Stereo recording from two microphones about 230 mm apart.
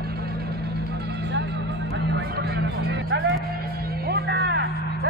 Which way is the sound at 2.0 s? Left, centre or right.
Right.